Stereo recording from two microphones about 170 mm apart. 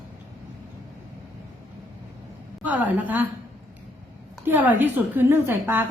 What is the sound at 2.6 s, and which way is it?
Speech, 10° right (ahead or behind).